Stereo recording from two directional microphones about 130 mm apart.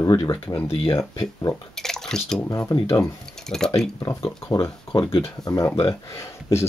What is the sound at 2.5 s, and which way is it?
Speech, 25° left (ahead or behind).